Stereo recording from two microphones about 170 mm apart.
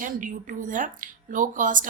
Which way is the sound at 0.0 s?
50° right (ahead or behind).